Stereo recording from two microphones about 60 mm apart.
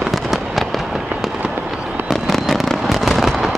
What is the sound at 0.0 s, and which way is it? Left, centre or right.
Fireworks, centre.